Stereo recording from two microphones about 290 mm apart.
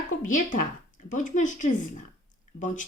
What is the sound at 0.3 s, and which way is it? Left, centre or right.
A woman's voice, left.